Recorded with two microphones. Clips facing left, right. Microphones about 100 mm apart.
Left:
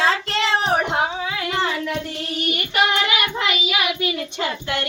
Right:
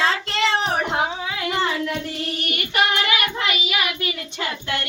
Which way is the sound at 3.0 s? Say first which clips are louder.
Left 1 dB; 20° left (ahead or behind).